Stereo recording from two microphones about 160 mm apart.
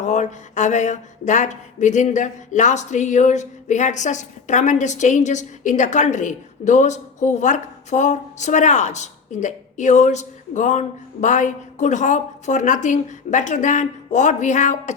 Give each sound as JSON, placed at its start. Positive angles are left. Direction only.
{"t": 0.0, "sound": "speech", "side_deg": 50}